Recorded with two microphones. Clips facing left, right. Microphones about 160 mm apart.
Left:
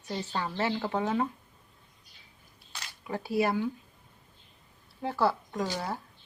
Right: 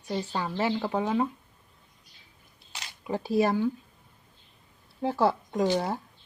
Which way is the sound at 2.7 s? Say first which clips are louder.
Right 4 dB; 20° right (ahead or behind).